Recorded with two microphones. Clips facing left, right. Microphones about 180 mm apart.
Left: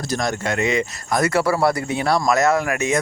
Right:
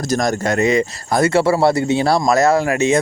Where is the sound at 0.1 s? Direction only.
40° right (ahead or behind).